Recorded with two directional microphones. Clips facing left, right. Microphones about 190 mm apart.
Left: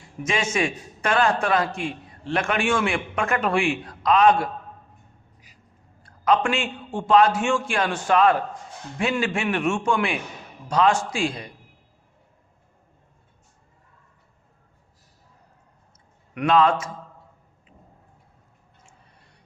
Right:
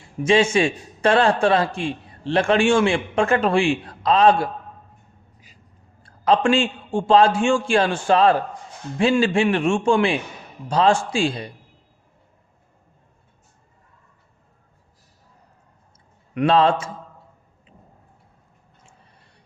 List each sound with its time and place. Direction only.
0.2 s a man's voice: 30° right (ahead or behind)
6.0 s a man's voice: 30° right (ahead or behind)
16.3 s a man's voice: 30° right (ahead or behind)